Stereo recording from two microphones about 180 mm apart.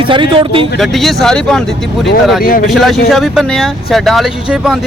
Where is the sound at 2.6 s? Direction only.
Centre (ahead or behind).